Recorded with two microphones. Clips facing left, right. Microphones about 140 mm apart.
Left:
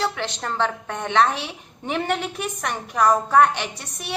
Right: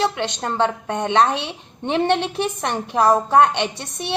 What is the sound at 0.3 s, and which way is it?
A woman's voice, 20° right (ahead or behind).